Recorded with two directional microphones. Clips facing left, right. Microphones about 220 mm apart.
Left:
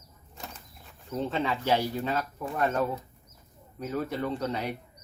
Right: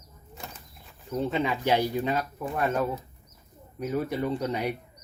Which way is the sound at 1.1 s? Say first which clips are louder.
Right 2 dB; 15° right (ahead or behind).